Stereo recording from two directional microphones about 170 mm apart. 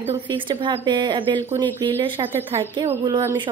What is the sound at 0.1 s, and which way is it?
Speech, 30° right (ahead or behind).